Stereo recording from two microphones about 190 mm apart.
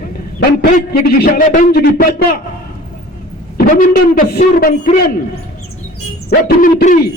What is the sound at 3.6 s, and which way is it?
Speech, 45° left (ahead or behind).